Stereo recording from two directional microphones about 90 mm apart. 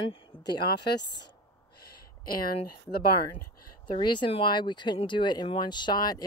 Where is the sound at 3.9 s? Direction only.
60° left (ahead or behind).